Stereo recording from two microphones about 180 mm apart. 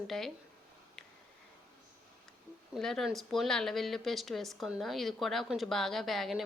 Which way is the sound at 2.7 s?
Centre (ahead or behind).